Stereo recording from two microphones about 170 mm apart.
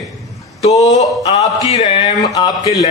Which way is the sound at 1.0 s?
40° left (ahead or behind).